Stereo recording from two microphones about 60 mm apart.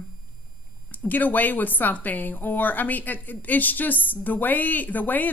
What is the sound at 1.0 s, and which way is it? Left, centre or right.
A woman's voice, left.